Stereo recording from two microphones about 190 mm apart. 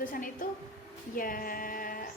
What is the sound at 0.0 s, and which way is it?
A woman's voice, 45° left (ahead or behind).